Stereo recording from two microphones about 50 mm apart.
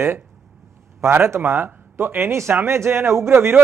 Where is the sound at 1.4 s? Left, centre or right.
Right.